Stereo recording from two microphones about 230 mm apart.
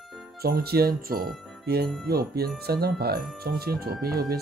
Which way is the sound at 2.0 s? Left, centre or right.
Right.